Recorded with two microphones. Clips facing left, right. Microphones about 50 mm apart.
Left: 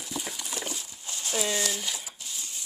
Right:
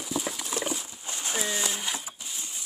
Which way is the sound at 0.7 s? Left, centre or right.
Right.